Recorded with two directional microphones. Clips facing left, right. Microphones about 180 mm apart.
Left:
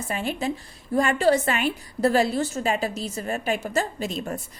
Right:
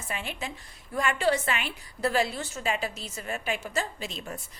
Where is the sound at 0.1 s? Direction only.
40° left (ahead or behind).